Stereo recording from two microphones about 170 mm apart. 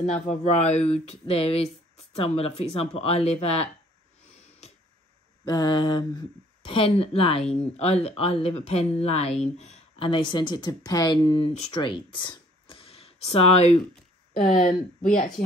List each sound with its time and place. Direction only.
0.0 s speech: 45° left (ahead or behind)
5.5 s speech: 25° left (ahead or behind)
14.5 s speech: 50° left (ahead or behind)